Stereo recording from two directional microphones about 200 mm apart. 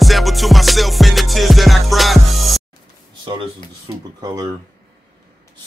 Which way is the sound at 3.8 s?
20° right (ahead or behind).